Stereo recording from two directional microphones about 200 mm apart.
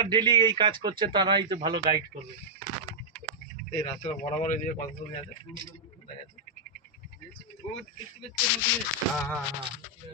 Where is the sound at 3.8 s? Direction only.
35° left (ahead or behind).